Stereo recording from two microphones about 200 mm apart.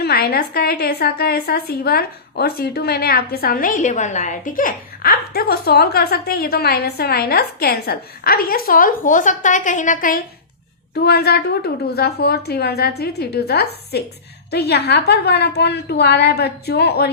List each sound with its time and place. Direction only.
0.0 s a woman's voice: 50° left (ahead or behind)
11.0 s a woman's voice: 55° left (ahead or behind)